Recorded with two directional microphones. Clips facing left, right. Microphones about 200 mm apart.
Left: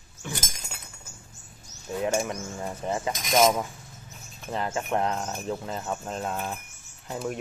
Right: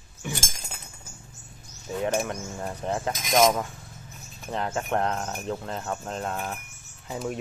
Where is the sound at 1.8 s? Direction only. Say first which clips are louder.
Even; centre (ahead or behind).